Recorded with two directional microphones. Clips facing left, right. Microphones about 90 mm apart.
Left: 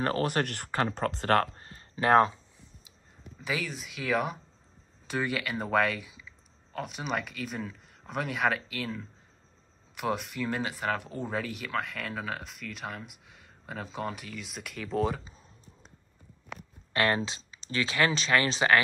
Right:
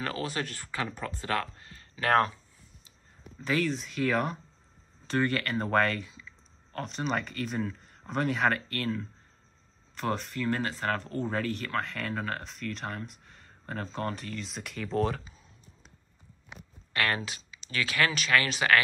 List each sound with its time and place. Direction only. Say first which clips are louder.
0.2 s speech: left 5 dB; 55° left (ahead or behind)
0.9 s speech: left 8 dB; 65° left (ahead or behind)
1.5 s a sound: left 3 dB; 35° left (ahead or behind)
3.4 s speech: right 5 dB; 5° left (ahead or behind)
16.9 s speech: left 3 dB; 25° left (ahead or behind)